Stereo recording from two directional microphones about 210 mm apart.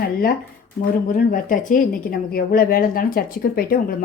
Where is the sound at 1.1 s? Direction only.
40° left (ahead or behind).